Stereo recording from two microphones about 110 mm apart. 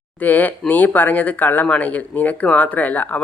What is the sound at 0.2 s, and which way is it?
Speech, 15° left (ahead or behind).